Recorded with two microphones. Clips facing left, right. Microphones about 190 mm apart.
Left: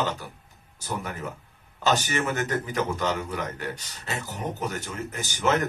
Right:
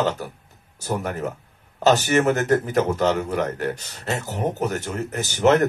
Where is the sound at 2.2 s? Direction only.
45° right (ahead or behind).